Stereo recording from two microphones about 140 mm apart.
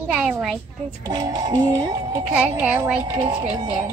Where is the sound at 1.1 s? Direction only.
25° right (ahead or behind).